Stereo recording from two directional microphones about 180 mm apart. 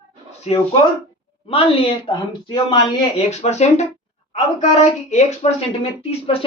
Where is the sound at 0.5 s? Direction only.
35° left (ahead or behind).